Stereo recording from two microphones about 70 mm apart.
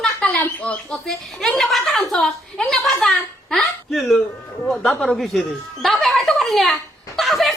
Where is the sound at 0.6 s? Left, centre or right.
Centre.